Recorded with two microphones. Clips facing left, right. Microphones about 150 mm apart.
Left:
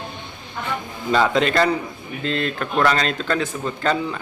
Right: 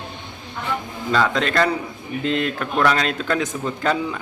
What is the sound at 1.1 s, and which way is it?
Speech, 5° left (ahead or behind).